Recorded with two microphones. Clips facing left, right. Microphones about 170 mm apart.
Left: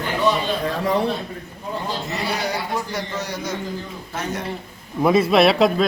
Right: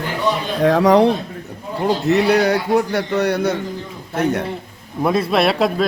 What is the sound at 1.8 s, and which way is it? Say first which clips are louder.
A man's voice: right 14 dB; 70° right (ahead or behind).